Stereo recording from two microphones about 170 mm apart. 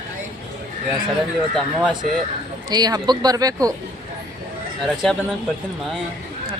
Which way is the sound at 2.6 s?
25° right (ahead or behind).